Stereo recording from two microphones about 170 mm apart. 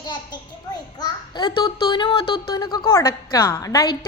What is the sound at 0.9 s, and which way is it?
A child's voice, 25° left (ahead or behind).